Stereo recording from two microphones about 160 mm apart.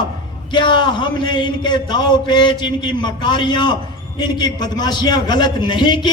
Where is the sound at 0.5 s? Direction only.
30° left (ahead or behind).